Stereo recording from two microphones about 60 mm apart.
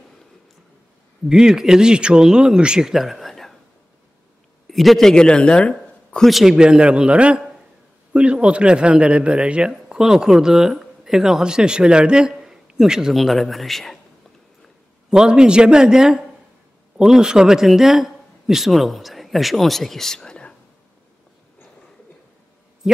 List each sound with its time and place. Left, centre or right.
1.3 s speech: centre
2.9 s a sound: centre
4.6 s a man's voice: centre
6.2 s speech: centre
6.5 s a man's voice: centre
13.2 s speech: centre
15.0 s speech: centre